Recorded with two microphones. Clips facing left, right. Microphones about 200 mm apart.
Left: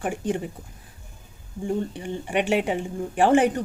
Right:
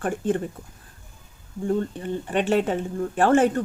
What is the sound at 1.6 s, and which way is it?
Speech, 15° left (ahead or behind).